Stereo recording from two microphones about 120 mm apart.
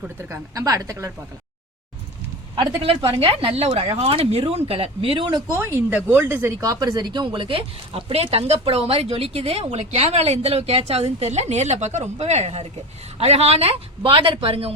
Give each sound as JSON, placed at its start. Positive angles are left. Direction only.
{"t": 0.2, "sound": "speech", "side_deg": -25}
{"t": 2.6, "sound": "speech", "side_deg": -45}
{"t": 5.5, "sound": "speech", "side_deg": -20}
{"t": 6.7, "sound": "speech", "side_deg": -30}